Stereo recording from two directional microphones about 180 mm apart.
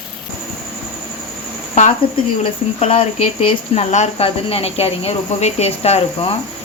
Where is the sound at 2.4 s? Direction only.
35° left (ahead or behind).